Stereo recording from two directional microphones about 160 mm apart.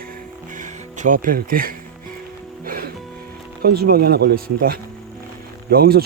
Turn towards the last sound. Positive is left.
turn(degrees=-75)  # may be behind; listen again after turning